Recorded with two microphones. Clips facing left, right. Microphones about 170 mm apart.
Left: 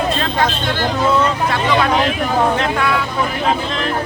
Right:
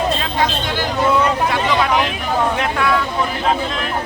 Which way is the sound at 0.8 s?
15° right (ahead or behind).